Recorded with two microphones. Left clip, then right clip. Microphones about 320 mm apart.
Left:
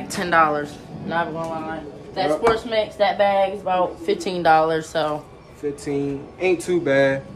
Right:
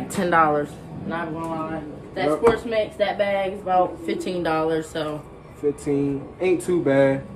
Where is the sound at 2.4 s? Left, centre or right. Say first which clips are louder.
Right 1 dB; centre.